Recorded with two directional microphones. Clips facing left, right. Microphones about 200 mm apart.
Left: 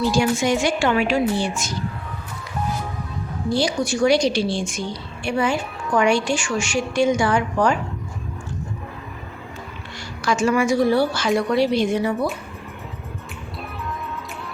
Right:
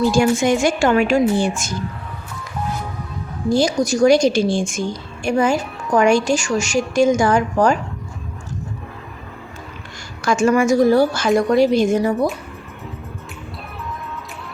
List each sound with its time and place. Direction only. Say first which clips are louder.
0.1 s a woman's voice: right 4 dB; 50° right (ahead or behind)
3.5 s a woman's voice: right 5 dB; 45° right (ahead or behind)
10.2 s a woman's voice: right 4 dB; 50° right (ahead or behind)